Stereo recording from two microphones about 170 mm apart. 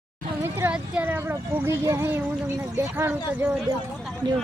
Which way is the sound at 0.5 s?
10° right (ahead or behind).